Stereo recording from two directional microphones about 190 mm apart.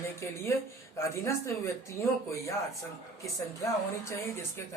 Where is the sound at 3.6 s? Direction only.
15° left (ahead or behind).